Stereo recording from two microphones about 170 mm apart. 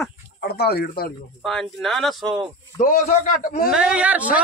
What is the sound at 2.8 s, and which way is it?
Speech, 55° left (ahead or behind).